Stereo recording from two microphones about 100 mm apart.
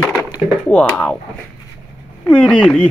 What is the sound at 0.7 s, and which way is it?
Speech, 15° left (ahead or behind).